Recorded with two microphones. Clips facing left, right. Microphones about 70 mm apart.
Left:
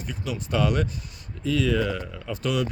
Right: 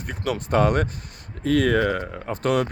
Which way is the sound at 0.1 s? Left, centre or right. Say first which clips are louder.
Right 6 dB; right.